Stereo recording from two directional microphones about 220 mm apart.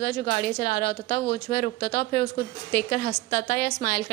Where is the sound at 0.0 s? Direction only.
40° left (ahead or behind).